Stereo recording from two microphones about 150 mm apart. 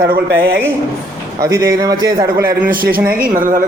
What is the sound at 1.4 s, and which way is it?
Speech, 20° right (ahead or behind).